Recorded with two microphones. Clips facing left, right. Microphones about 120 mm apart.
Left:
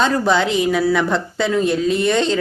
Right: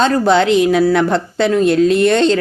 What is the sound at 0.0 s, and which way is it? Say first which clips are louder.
Speech: right 4 dB; 70° right (ahead or behind).